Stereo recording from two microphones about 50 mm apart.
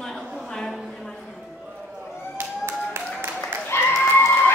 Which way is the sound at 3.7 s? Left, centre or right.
Left.